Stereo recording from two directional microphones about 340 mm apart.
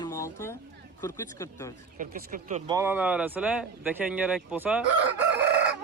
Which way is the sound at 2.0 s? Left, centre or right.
Right.